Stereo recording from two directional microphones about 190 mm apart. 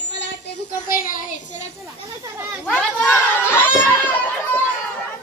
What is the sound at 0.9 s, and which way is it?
Child singing, 45° left (ahead or behind).